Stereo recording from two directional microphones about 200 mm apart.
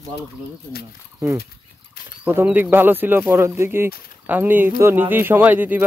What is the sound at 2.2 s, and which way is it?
Speech, 10° right (ahead or behind).